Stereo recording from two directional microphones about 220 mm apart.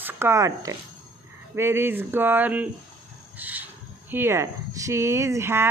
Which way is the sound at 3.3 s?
10° right (ahead or behind).